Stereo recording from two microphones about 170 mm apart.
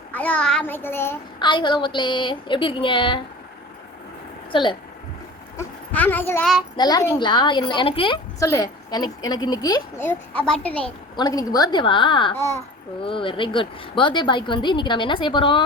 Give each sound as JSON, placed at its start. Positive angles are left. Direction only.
{"t": 0.1, "sound": "a child's voice", "side_deg": 10}
{"t": 1.4, "sound": "speech", "side_deg": 25}
{"t": 4.5, "sound": "speech", "side_deg": 30}
{"t": 5.5, "sound": "speech", "side_deg": 10}
{"t": 6.7, "sound": "speech", "side_deg": 25}
{"t": 8.4, "sound": "speech", "side_deg": 20}
{"t": 10.0, "sound": "a child's voice", "side_deg": 10}
{"t": 10.8, "sound": "speech", "side_deg": 25}